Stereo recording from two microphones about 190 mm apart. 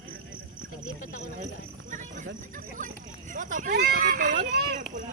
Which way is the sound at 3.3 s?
40° right (ahead or behind).